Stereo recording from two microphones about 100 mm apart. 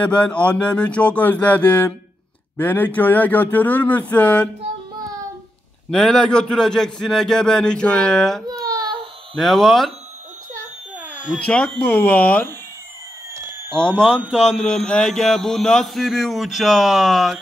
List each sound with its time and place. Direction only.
0.0 s a man's voice: 10° left (ahead or behind)
5.9 s a man's voice: 5° left (ahead or behind)
8.5 s baby cry: 40° right (ahead or behind)
9.3 s speech: 5° left (ahead or behind)
11.0 s cat: 15° right (ahead or behind)
11.3 s a man's voice: 10° left (ahead or behind)
13.3 s a sound: 25° right (ahead or behind)
13.7 s a man's voice: 10° left (ahead or behind)